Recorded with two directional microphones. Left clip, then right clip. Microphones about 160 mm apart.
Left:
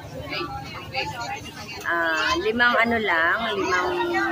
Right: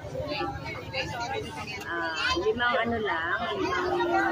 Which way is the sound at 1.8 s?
25° left (ahead or behind).